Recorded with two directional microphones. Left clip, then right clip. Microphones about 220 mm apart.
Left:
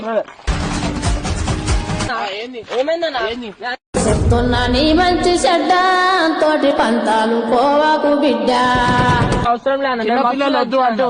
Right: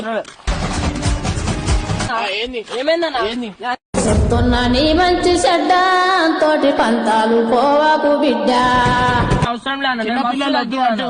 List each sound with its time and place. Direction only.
4.0 s music: centre (ahead or behind)
9.8 s a man's voice: 55° right (ahead or behind)